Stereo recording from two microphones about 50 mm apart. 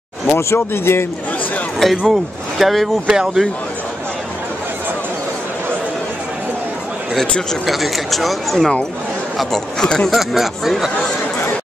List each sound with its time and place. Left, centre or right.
0.4 s speech: left
1.8 s speech: centre
3.1 s speech: centre
7.6 s speech: centre
9.8 s speech: centre
10.1 s speech: centre